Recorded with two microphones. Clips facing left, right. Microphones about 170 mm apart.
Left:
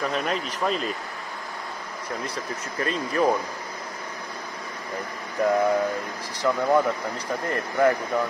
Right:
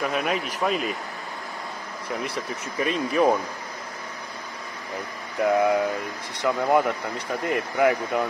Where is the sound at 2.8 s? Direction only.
15° right (ahead or behind).